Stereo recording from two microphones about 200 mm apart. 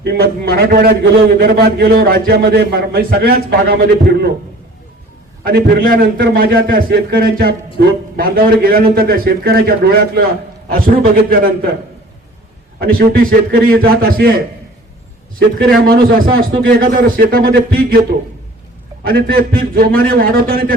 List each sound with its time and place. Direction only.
0.0 s a man's voice: 50° right (ahead or behind)
5.5 s a man's voice: 45° right (ahead or behind)
12.8 s a man's voice: 50° right (ahead or behind)
15.4 s a man's voice: 50° right (ahead or behind)
19.0 s a man's voice: 50° right (ahead or behind)